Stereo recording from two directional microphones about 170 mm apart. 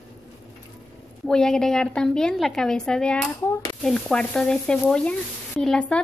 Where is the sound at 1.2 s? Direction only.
5° left (ahead or behind).